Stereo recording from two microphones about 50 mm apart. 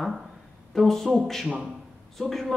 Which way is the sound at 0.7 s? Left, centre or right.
Centre.